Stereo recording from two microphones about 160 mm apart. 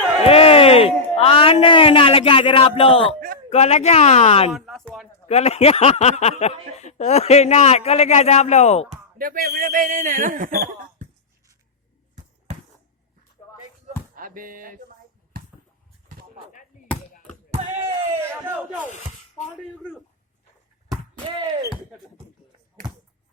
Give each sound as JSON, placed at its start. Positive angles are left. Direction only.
{"t": 0.3, "sound": "a man's voice", "side_deg": 40}
{"t": 4.5, "sound": "speech", "side_deg": 0}
{"t": 5.3, "sound": "speech", "side_deg": 40}
{"t": 9.1, "sound": "speech", "side_deg": -60}
{"t": 14.2, "sound": "speech", "side_deg": -60}
{"t": 15.3, "sound": "a sound", "side_deg": -65}
{"t": 17.5, "sound": "a sound", "side_deg": -40}